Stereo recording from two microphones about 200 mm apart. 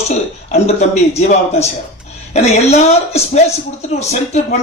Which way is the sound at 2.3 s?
30° left (ahead or behind).